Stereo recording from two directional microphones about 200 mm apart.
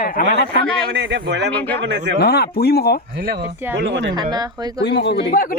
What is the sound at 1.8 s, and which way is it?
Speech, 60° right (ahead or behind).